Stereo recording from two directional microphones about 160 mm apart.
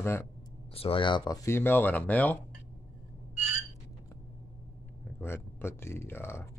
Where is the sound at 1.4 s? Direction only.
15° left (ahead or behind).